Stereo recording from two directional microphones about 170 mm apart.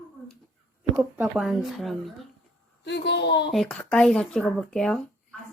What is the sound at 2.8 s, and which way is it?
Speech, 90° left.